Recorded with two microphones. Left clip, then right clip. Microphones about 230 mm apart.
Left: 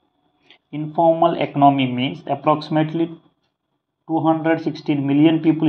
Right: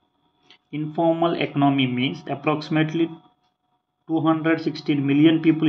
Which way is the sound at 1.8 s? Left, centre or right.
Centre.